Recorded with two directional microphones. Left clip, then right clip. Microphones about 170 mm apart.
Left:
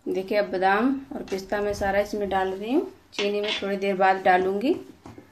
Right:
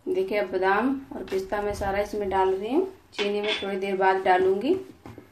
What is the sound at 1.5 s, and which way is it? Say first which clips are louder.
A woman's voice: left 5 dB; 45° left (ahead or behind).